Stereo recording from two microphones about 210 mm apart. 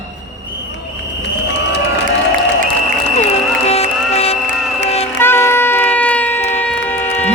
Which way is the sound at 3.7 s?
30° left (ahead or behind).